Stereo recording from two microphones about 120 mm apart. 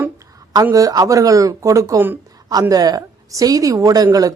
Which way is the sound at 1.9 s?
15° right (ahead or behind).